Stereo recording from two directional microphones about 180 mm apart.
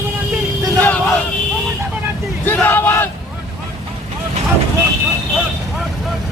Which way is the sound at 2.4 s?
10° left (ahead or behind).